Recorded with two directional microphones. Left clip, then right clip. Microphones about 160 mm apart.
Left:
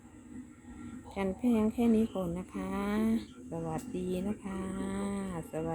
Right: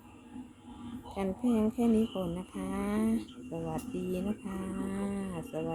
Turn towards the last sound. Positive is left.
turn(degrees=0)  # may be behind; listen again after turning